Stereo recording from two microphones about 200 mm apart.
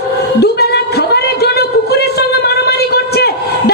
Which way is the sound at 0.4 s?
55° left (ahead or behind).